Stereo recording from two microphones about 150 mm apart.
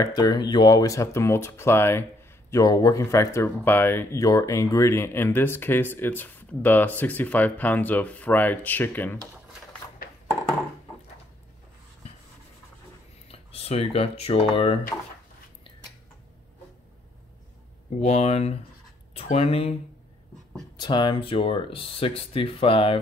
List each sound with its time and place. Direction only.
0.0 s speech: 25° left (ahead or behind)
13.3 s speech: 40° left (ahead or behind)
18.0 s speech: 45° left (ahead or behind)
20.7 s speech: 30° left (ahead or behind)